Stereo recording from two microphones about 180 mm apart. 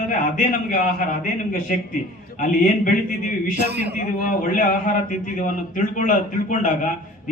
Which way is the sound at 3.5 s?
65° right (ahead or behind).